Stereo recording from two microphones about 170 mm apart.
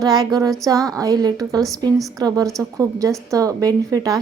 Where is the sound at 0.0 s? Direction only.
25° right (ahead or behind).